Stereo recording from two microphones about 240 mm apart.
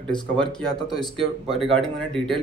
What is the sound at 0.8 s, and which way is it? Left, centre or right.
Speech, centre.